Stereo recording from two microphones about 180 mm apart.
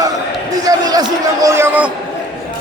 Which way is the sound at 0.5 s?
20° right (ahead or behind).